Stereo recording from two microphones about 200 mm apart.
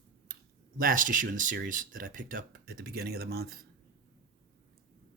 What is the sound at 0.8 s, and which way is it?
Speech, 45° right (ahead or behind).